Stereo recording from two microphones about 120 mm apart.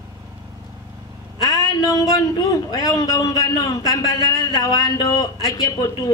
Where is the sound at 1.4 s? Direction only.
Centre (ahead or behind).